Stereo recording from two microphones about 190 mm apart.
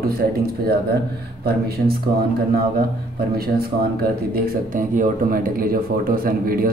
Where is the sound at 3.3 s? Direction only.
55° right (ahead or behind).